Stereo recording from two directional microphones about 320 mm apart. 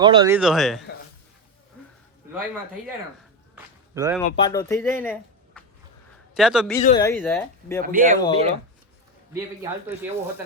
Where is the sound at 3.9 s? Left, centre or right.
Centre.